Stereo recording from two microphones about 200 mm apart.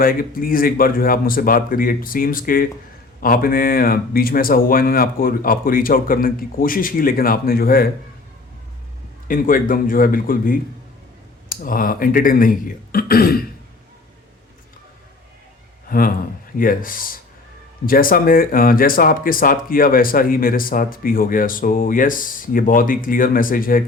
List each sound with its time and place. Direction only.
0.0 s speech: 45° left (ahead or behind)
9.2 s speech: 45° left (ahead or behind)
15.9 s speech: 45° left (ahead or behind)